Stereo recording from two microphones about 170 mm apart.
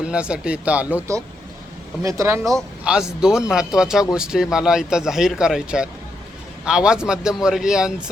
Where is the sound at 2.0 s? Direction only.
20° right (ahead or behind).